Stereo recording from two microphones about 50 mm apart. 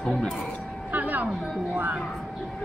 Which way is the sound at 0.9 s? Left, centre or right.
Right.